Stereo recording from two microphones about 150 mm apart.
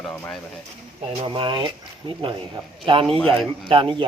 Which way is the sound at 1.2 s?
35° right (ahead or behind).